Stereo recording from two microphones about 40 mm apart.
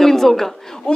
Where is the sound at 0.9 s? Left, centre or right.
Left.